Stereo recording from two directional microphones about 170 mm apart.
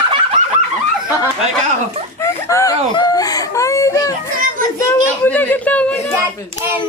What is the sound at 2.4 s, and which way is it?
Speech, 20° left (ahead or behind).